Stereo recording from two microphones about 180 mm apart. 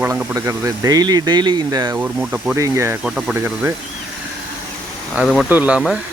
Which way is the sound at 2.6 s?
15° right (ahead or behind).